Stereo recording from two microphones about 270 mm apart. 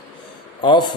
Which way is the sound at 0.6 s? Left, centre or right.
Centre.